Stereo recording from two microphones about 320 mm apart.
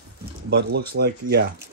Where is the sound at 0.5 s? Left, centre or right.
Right.